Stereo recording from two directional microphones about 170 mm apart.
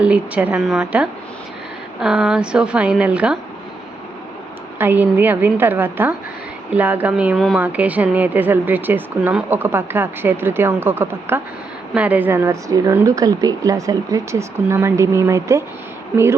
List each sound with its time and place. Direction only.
0.0 s a woman's voice: 10° right (ahead or behind)
4.8 s speech: 10° right (ahead or behind)